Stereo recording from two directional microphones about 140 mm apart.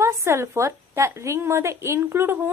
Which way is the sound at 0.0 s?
20° right (ahead or behind).